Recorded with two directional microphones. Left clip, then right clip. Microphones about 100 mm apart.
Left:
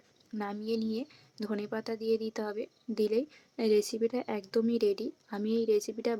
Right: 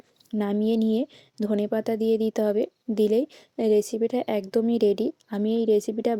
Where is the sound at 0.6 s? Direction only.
40° right (ahead or behind).